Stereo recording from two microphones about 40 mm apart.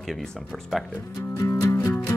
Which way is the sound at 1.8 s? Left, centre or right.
Left.